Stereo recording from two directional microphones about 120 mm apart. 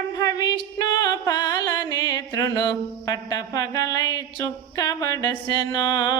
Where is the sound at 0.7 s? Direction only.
30° left (ahead or behind).